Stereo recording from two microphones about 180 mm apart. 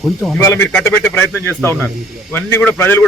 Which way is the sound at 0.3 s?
15° left (ahead or behind).